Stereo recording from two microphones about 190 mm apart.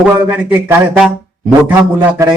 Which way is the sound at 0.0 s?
10° right (ahead or behind).